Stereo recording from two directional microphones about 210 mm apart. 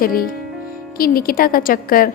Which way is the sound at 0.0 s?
45° left (ahead or behind).